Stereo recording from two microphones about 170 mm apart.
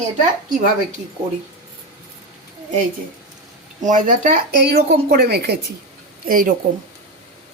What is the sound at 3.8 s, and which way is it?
A woman's voice, 50° right (ahead or behind).